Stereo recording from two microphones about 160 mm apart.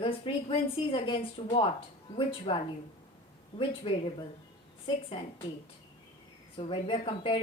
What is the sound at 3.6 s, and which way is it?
A woman's voice, 35° left (ahead or behind).